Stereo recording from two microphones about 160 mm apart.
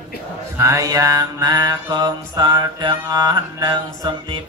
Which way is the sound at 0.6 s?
20° right (ahead or behind).